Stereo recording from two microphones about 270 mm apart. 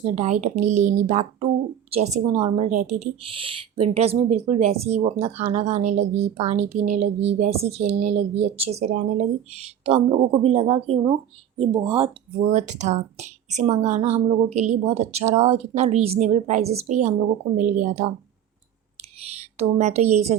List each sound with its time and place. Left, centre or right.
0.0 s speech: right
19.4 s a woman's voice: right